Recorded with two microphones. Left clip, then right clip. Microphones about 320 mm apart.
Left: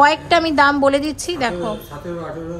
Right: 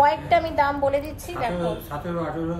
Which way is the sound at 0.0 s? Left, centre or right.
Left.